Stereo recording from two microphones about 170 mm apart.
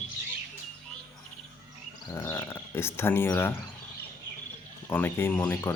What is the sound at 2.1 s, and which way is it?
Speech, 15° left (ahead or behind).